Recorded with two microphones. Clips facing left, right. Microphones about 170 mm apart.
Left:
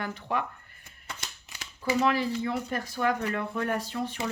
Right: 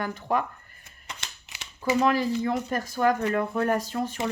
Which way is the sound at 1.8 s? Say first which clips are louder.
Right 3 dB; 45° right (ahead or behind).